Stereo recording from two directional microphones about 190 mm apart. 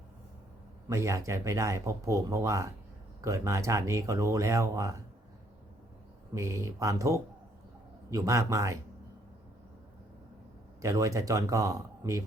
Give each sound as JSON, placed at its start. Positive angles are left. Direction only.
{"t": 0.9, "sound": "speech", "side_deg": -15}
{"t": 6.3, "sound": "speech", "side_deg": -15}
{"t": 10.8, "sound": "speech", "side_deg": -15}